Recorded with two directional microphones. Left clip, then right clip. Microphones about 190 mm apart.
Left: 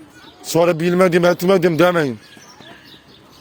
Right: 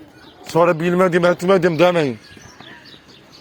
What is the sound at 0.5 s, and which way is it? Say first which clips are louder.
Speech: even; 65° left (ahead or behind).